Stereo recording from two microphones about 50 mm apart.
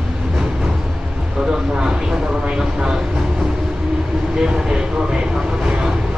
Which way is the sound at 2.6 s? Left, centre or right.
Centre.